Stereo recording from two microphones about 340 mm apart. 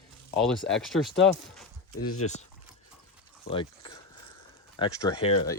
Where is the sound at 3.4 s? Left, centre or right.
Centre.